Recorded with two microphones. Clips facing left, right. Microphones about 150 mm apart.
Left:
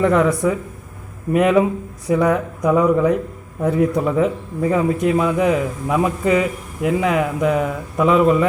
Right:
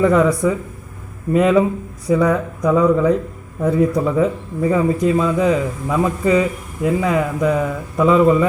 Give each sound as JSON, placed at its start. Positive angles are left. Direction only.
{"t": 0.0, "sound": "a man's voice", "side_deg": 0}